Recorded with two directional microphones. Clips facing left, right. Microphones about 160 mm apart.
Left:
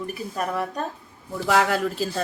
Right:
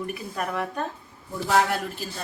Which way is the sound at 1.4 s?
90° left.